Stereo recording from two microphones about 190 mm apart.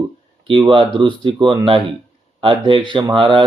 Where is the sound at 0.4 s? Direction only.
25° right (ahead or behind).